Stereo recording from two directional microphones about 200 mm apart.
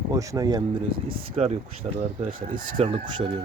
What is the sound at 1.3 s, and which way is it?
Speech, 35° right (ahead or behind).